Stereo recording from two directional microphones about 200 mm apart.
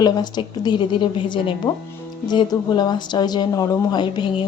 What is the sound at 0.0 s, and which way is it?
A woman's voice, 20° left (ahead or behind).